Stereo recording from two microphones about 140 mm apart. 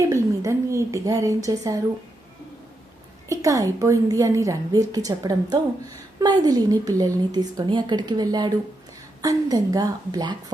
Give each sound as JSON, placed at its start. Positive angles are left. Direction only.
{"t": 0.0, "sound": "a woman's voice", "side_deg": -20}
{"t": 3.2, "sound": "a woman's voice", "side_deg": -25}